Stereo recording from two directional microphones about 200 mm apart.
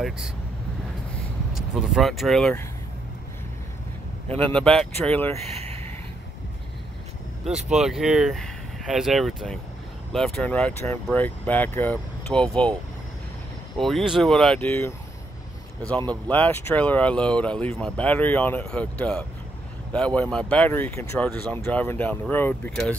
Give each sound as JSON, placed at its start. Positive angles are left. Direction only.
{"t": 1.5, "sound": "speech", "side_deg": 0}
{"t": 4.6, "sound": "speech", "side_deg": 5}
{"t": 5.3, "sound": "speech", "side_deg": -30}
{"t": 7.7, "sound": "speech", "side_deg": 0}
{"t": 13.7, "sound": "speech", "side_deg": 0}
{"t": 16.1, "sound": "speech", "side_deg": 10}